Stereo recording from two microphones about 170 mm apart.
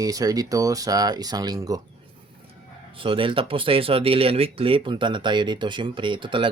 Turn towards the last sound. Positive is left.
turn(degrees=-30)  # may be behind; listen again after turning